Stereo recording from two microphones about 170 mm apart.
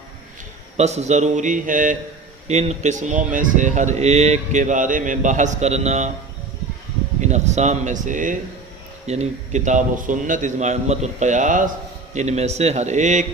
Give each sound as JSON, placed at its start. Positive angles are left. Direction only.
{"t": 0.8, "sound": "speech", "side_deg": -40}
{"t": 2.5, "sound": "speech", "side_deg": -40}
{"t": 7.2, "sound": "speech", "side_deg": -40}